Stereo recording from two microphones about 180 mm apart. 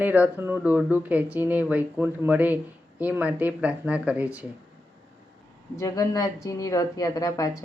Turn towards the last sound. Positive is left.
turn(degrees=20)  # may be behind; listen again after turning